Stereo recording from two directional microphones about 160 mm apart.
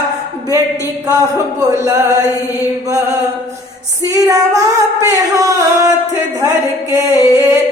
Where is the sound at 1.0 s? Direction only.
20° right (ahead or behind).